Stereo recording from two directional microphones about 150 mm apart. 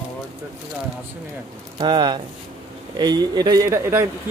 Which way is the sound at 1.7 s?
30° right (ahead or behind).